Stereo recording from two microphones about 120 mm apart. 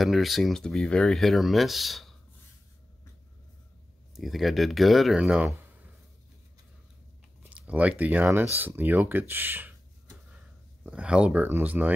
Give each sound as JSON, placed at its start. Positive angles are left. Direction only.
{"t": 0.0, "sound": "speech", "side_deg": 0}
{"t": 4.1, "sound": "speech", "side_deg": 0}
{"t": 7.4, "sound": "speech", "side_deg": -10}
{"t": 9.3, "sound": "a sound", "side_deg": -15}
{"t": 10.9, "sound": "speech", "side_deg": -10}